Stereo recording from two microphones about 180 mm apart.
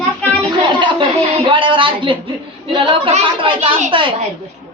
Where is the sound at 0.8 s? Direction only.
25° right (ahead or behind).